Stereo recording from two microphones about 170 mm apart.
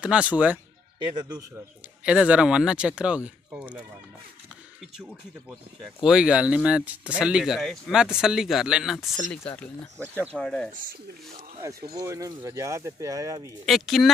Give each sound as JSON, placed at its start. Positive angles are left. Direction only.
{"t": 0.0, "sound": "speech", "side_deg": -5}
{"t": 2.0, "sound": "speech", "side_deg": -5}
{"t": 6.0, "sound": "speech", "side_deg": -5}
{"t": 10.3, "sound": "speech", "side_deg": 5}
{"t": 12.0, "sound": "speech", "side_deg": -20}
{"t": 13.7, "sound": "speech", "side_deg": 0}